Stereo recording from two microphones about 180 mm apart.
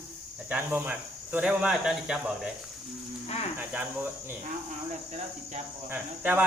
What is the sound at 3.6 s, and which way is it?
Speech, 10° right (ahead or behind).